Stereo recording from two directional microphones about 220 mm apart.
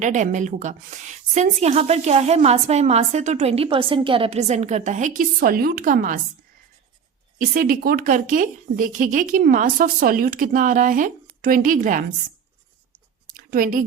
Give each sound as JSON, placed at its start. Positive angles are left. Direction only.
{"t": 0.0, "sound": "a woman's voice", "side_deg": -35}
{"t": 7.3, "sound": "a woman's voice", "side_deg": -40}
{"t": 13.2, "sound": "a sound", "side_deg": -40}